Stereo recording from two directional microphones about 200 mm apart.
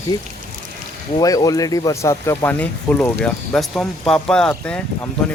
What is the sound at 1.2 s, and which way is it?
Speech, 20° left (ahead or behind).